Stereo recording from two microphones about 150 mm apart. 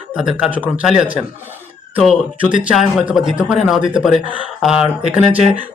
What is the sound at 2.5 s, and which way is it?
Speech, 5° right (ahead or behind).